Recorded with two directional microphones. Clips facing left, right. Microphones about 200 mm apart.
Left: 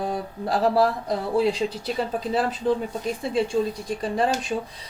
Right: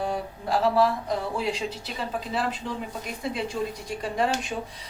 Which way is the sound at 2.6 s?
40° left (ahead or behind).